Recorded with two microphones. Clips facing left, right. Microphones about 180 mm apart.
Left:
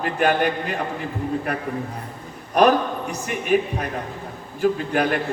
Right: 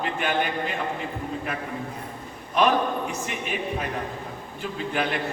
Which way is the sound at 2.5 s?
40° left (ahead or behind).